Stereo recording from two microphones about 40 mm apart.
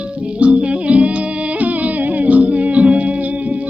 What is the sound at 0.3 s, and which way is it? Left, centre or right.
Music, right.